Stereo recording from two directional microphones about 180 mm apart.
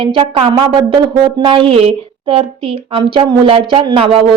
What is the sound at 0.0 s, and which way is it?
A woman's voice, 30° right (ahead or behind).